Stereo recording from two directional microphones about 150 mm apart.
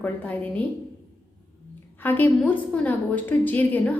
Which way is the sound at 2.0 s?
10° left (ahead or behind).